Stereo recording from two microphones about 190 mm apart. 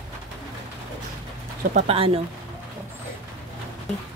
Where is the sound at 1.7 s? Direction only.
30° right (ahead or behind).